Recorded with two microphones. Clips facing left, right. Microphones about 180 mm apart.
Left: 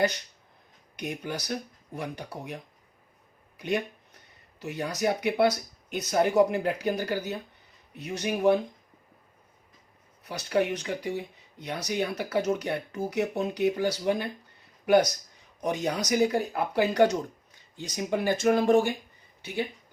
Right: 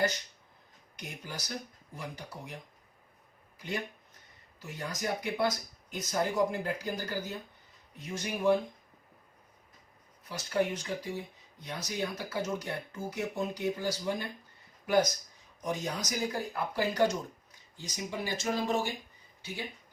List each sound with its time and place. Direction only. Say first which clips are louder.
0.9 s speech: left 9 dB; 65° left (ahead or behind)
4.6 s speech: left 8 dB; 70° left (ahead or behind)
10.2 s speech: left 4 dB; 70° left (ahead or behind)